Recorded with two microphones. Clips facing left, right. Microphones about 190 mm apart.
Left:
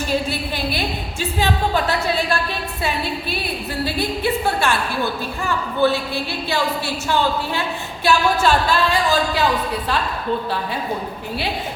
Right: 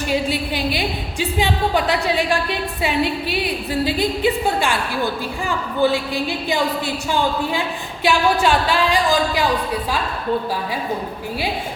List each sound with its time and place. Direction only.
0.1 s a woman's voice: 15° right (ahead or behind)